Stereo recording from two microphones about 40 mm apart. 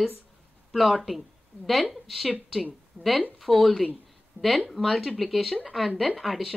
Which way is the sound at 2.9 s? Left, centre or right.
Left.